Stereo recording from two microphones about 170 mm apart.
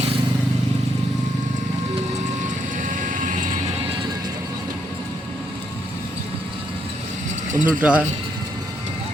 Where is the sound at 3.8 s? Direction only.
30° right (ahead or behind).